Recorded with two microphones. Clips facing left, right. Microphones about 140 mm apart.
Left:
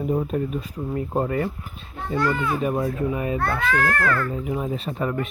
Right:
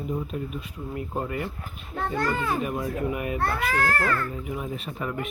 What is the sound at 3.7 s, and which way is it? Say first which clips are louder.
Speech: left 1 dB; 30° right (ahead or behind).